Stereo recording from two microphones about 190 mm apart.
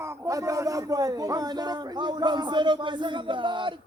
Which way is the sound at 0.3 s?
15° right (ahead or behind).